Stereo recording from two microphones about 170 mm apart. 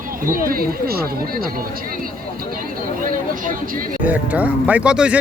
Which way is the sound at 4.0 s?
10° right (ahead or behind).